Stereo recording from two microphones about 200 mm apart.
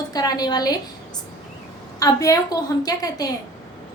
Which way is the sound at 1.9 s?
15° left (ahead or behind).